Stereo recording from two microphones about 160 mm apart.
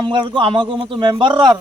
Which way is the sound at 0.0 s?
30° right (ahead or behind).